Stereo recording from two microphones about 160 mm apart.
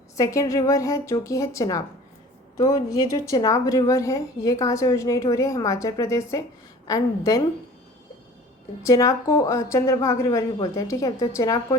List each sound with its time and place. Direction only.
0.2 s a woman's voice: 20° left (ahead or behind)
8.8 s a woman's voice: 20° left (ahead or behind)